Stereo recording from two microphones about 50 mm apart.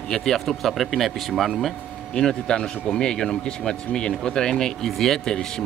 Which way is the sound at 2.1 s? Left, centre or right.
Centre.